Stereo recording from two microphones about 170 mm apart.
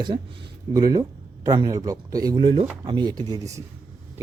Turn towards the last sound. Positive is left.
turn(degrees=-20)  # may be behind; listen again after turning